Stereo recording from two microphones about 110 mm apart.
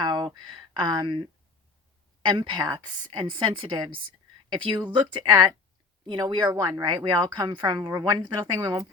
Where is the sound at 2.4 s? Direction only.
40° right (ahead or behind).